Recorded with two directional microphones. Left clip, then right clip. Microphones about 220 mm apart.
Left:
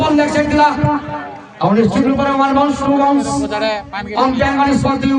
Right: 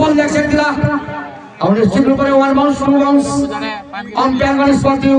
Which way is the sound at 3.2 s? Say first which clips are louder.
Left 1 dB; 50° left (ahead or behind).